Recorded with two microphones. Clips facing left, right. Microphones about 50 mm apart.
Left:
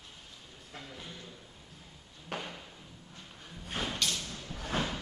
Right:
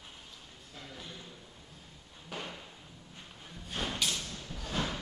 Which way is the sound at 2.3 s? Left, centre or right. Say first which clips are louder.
Left 2 dB; left.